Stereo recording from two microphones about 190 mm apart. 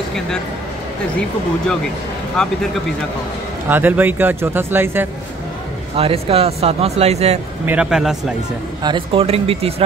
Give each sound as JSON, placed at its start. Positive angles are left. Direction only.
{"t": 2.4, "sound": "speech", "side_deg": 5}
{"t": 3.6, "sound": "speech", "side_deg": -10}
{"t": 5.9, "sound": "speech", "side_deg": -30}
{"t": 7.6, "sound": "speech", "side_deg": -5}
{"t": 8.8, "sound": "speech", "side_deg": -25}